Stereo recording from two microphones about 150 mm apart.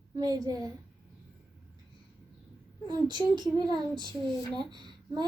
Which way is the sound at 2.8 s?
30° right (ahead or behind).